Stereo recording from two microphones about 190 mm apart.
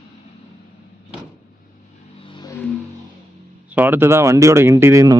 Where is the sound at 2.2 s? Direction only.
25° left (ahead or behind).